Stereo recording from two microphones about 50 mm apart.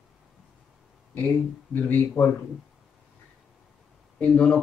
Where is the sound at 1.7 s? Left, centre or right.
Left.